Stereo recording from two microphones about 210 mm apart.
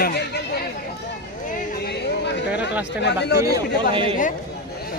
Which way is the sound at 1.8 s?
50° left (ahead or behind).